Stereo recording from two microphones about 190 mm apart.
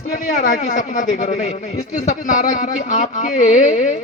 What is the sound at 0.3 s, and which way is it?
A man's voice, 40° left (ahead or behind).